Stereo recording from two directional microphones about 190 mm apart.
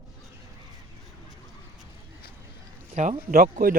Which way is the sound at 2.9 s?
40° right (ahead or behind).